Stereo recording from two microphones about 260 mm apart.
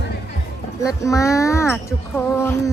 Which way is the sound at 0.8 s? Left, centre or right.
Centre.